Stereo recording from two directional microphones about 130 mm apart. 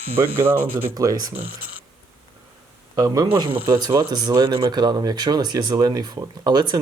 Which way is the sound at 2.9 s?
30° right (ahead or behind).